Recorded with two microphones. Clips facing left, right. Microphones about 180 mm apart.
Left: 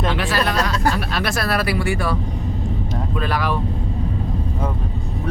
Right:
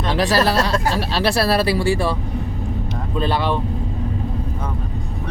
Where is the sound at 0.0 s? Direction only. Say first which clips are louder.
Right 3 dB; 40° right (ahead or behind).